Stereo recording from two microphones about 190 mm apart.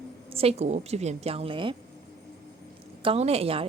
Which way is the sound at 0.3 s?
35° right (ahead or behind).